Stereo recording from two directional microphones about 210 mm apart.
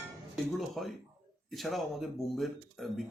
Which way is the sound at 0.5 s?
Centre (ahead or behind).